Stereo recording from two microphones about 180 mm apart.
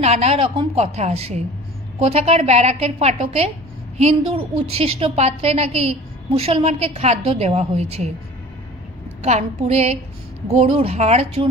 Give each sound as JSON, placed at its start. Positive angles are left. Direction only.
{"t": 0.0, "sound": "a woman's voice", "side_deg": -35}
{"t": 9.2, "sound": "a woman's voice", "side_deg": -35}